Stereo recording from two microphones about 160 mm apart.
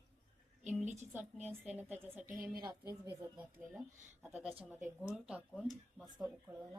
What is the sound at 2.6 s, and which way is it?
Speech, 25° right (ahead or behind).